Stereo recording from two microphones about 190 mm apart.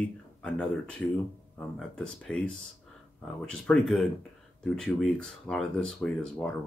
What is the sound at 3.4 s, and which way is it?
Speech, centre (ahead or behind).